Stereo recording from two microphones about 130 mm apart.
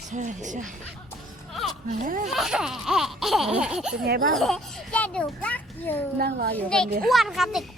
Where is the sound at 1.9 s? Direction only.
90° right.